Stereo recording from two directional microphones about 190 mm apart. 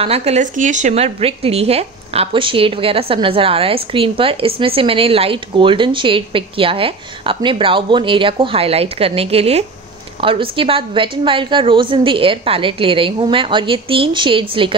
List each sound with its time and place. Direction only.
0.0 s speech: 35° right (ahead or behind)